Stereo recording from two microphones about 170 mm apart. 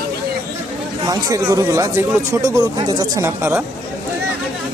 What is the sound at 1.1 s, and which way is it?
Speech, 20° right (ahead or behind).